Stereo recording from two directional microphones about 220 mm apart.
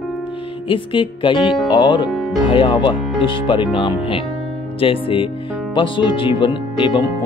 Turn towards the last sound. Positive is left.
turn(degrees=20)  # may be behind; listen again after turning